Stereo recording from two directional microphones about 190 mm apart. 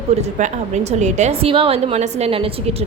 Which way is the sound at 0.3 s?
40° right (ahead or behind).